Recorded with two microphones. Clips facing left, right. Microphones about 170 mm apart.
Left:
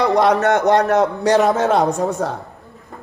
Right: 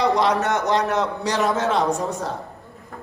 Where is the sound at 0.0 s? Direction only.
55° left (ahead or behind).